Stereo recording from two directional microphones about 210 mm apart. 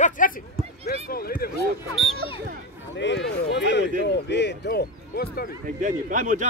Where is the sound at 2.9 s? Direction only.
55° left (ahead or behind).